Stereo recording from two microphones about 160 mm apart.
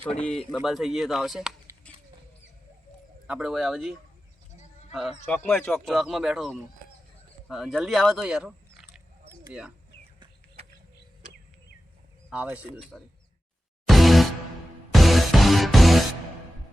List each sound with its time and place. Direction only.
0.2 s speech: 5° left (ahead or behind)
1.8 s creak: 10° left (ahead or behind)
3.2 s speech: 5° right (ahead or behind)
5.3 s speech: 15° left (ahead or behind)
5.7 s speech: centre (ahead or behind)
12.3 s speech: 10° right (ahead or behind)
13.8 s music: centre (ahead or behind)